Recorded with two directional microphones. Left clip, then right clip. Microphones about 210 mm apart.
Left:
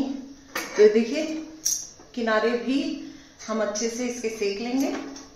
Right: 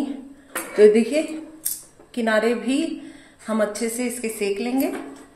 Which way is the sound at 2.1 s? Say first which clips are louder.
Right 3 dB; 50° right (ahead or behind).